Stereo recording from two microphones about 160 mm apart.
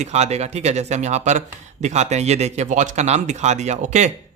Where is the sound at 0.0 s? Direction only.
45° right (ahead or behind).